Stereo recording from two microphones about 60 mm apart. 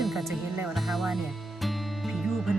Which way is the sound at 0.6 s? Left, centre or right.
Centre.